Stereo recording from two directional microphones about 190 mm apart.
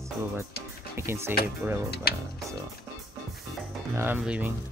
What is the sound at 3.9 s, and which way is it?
Speech, 10° right (ahead or behind).